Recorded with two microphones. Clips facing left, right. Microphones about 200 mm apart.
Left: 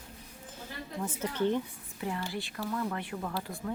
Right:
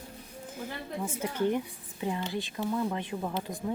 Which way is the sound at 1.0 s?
10° right (ahead or behind).